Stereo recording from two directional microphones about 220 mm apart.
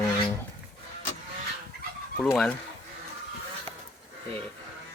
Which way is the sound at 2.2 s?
Centre (ahead or behind).